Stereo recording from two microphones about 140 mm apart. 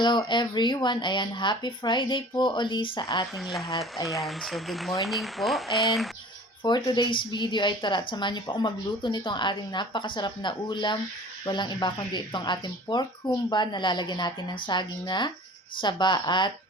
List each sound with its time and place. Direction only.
0.0 s a woman's voice: 35° left (ahead or behind)
3.3 s speech: centre (ahead or behind)
6.6 s a woman's voice: 30° left (ahead or behind)